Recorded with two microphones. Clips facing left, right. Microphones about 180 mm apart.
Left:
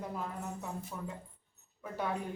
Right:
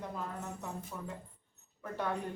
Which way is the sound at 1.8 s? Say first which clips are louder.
Even; 5° left (ahead or behind).